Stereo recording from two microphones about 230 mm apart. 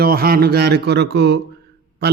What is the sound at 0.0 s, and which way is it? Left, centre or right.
A man's voice, right.